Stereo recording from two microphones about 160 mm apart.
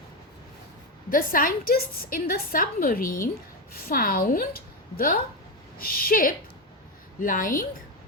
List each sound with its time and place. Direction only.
1.1 s a woman's voice: 60° left (ahead or behind)